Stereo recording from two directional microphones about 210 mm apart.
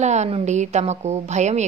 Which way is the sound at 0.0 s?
35° right (ahead or behind).